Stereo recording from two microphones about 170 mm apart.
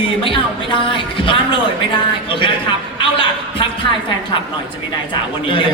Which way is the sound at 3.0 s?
30° left (ahead or behind).